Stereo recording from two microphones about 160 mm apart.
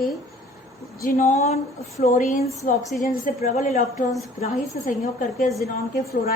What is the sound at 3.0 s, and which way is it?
Speech, 70° left (ahead or behind).